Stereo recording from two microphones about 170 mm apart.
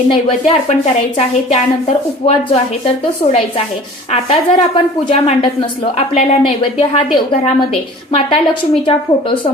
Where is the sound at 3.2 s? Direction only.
50° left (ahead or behind).